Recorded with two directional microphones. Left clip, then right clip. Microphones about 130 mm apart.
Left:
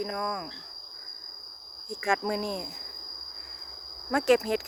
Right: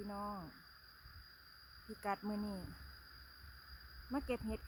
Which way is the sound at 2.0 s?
20° left (ahead or behind).